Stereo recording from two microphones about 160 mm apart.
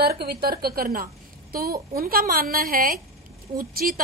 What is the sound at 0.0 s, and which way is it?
A woman's voice, 75° right (ahead or behind).